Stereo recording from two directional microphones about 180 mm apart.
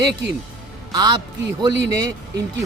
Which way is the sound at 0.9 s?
20° right (ahead or behind).